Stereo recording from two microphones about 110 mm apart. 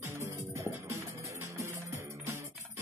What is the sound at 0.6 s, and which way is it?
Music, 30° right (ahead or behind).